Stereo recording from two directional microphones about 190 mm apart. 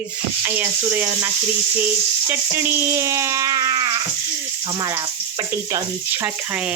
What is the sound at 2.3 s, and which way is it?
Speech, 10° right (ahead or behind).